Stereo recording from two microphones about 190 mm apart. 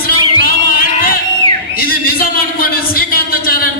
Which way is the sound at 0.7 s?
50° left (ahead or behind).